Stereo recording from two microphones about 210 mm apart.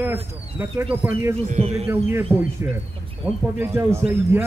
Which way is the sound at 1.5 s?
35° right (ahead or behind).